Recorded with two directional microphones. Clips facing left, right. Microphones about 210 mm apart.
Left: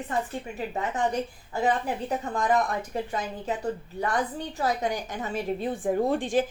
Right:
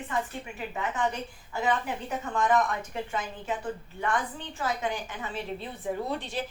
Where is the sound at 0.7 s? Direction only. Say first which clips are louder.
Left 3 dB; 40° left (ahead or behind).